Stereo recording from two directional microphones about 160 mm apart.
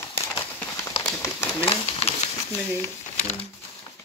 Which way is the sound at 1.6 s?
35° left (ahead or behind).